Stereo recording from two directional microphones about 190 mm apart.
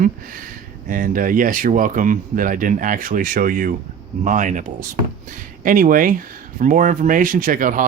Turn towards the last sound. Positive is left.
turn(degrees=-45)  # may be behind; listen again after turning